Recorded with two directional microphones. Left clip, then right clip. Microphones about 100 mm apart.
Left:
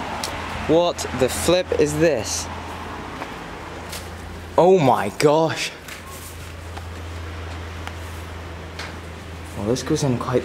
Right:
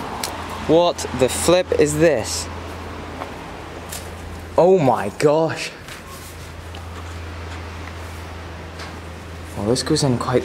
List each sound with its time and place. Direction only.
0.7 s speech: 5° right (ahead or behind)
4.6 s speech: 10° left (ahead or behind)
9.6 s speech: 20° right (ahead or behind)